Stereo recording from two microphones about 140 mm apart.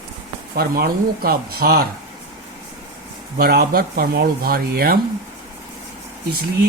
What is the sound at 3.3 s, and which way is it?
Speech, 90° right.